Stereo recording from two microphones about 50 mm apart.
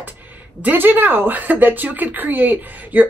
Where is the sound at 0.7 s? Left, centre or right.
Right.